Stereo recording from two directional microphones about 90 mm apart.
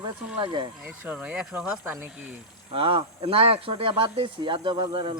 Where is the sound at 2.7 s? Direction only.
80° right.